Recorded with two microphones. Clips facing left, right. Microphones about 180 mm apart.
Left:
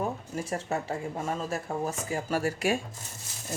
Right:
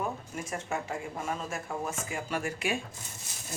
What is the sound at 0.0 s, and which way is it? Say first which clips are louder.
Speech: left 3 dB; 35° left (ahead or behind).